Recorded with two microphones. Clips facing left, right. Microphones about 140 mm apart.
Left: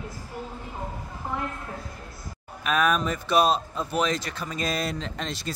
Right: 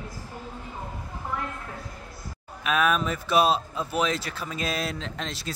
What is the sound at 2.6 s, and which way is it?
A man's voice, centre (ahead or behind).